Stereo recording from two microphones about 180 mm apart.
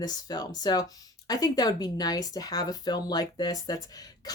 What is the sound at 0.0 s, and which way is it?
Speech, 20° left (ahead or behind).